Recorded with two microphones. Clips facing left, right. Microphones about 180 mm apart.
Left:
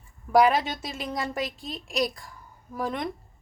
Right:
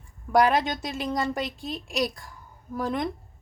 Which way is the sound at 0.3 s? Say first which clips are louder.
Left 1 dB; centre (ahead or behind).